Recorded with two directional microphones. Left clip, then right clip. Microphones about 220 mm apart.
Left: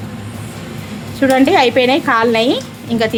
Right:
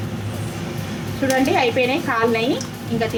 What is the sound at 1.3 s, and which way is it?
A woman's voice, 50° left (ahead or behind).